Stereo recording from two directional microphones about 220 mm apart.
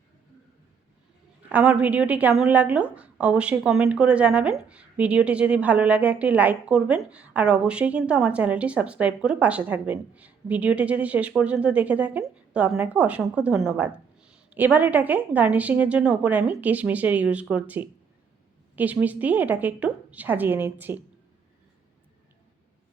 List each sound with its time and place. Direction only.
1.5 s a woman's voice: 5° right (ahead or behind)